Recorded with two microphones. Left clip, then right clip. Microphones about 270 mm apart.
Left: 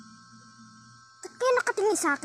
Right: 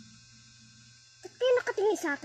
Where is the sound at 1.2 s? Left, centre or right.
Left.